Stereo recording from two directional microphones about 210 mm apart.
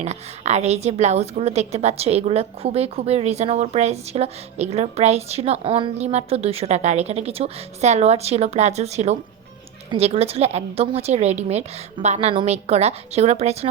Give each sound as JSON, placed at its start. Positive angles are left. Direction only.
{"t": 0.0, "sound": "a woman's voice", "side_deg": -30}